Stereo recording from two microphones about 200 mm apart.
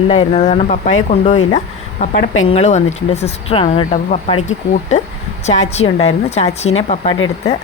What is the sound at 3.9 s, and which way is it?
Speech, 40° left (ahead or behind).